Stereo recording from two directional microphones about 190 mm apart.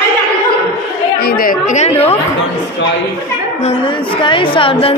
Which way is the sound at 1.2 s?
50° left (ahead or behind).